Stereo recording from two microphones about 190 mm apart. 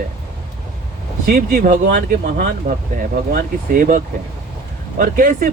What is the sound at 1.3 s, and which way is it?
Speech, 45° right (ahead or behind).